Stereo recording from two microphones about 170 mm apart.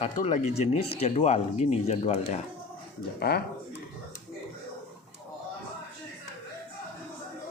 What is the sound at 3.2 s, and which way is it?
Speech, 65° left (ahead or behind).